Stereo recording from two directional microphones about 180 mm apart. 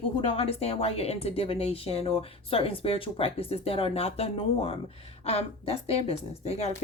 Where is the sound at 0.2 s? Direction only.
30° left (ahead or behind).